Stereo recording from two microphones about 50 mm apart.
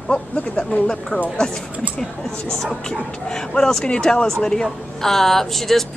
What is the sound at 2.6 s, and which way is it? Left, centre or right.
Speech, centre.